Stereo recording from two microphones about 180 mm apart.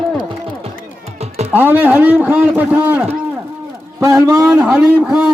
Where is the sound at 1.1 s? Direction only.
35° right (ahead or behind).